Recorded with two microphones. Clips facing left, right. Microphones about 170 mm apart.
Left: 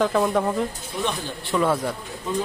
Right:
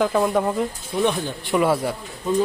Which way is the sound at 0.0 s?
Centre (ahead or behind).